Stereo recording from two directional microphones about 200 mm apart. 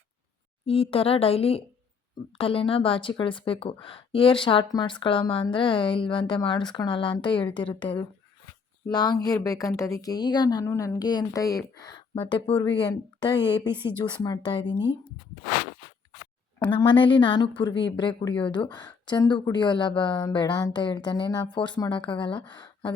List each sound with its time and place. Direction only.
0.6 s a woman's voice: 30° left (ahead or behind)
13.7 s speech: 10° right (ahead or behind)
14.0 s a woman's voice: 20° left (ahead or behind)
16.8 s a woman's voice: 25° left (ahead or behind)